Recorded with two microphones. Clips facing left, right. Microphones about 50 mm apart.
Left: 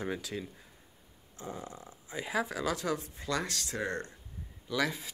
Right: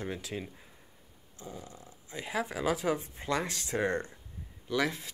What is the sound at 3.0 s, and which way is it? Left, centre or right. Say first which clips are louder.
Speech: right 1 dB; right.